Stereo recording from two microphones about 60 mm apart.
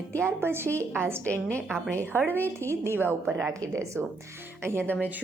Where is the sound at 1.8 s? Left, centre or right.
Left.